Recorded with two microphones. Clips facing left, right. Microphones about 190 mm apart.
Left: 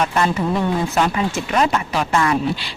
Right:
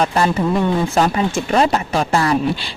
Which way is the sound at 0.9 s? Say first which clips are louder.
Right 3 dB; 35° right (ahead or behind).